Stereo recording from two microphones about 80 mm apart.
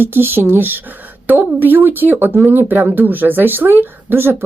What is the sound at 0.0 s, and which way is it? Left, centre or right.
Speech, right.